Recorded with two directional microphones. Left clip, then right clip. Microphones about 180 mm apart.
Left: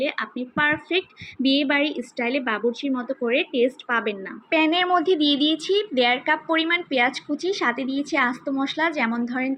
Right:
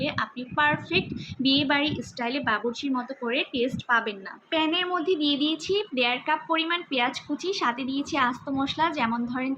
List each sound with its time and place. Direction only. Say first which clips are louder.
0.0 s a woman's voice: left 3 dB; 15° left (ahead or behind)
4.4 s a woman's voice: left 5 dB; 35° left (ahead or behind)